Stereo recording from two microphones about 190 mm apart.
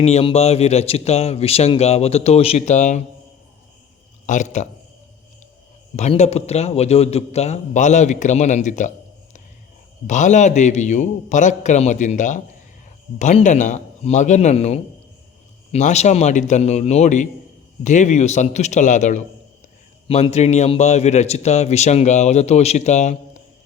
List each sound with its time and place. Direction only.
0.0 s a man's voice: 35° left (ahead or behind)
4.3 s a man's voice: 40° left (ahead or behind)
6.0 s a man's voice: 35° left (ahead or behind)
10.1 s a man's voice: 40° left (ahead or behind)